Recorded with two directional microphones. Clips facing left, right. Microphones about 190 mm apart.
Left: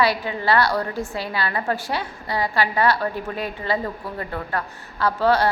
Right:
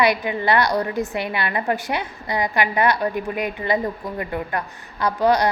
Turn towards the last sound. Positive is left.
turn(degrees=-15)  # may be behind; listen again after turning